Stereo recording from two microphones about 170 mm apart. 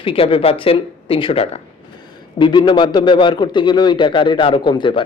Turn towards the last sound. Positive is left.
turn(degrees=30)  # may be behind; listen again after turning